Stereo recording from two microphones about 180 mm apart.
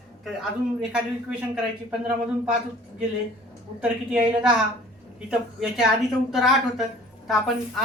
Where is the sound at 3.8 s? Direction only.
5° right (ahead or behind).